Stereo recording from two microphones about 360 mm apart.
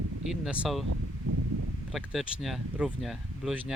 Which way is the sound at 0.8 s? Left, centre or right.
Right.